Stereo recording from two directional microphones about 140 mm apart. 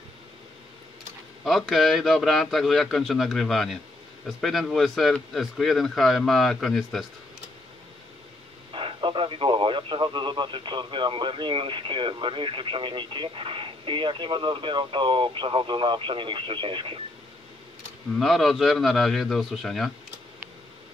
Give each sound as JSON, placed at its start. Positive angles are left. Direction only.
{"t": 1.4, "sound": "speech", "side_deg": 0}
{"t": 8.7, "sound": "speech", "side_deg": -35}
{"t": 18.2, "sound": "speech", "side_deg": 0}